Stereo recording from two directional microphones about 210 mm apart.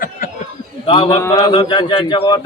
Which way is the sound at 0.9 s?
20° left (ahead or behind).